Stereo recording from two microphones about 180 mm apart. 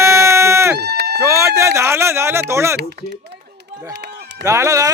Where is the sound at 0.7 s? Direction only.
65° right (ahead or behind).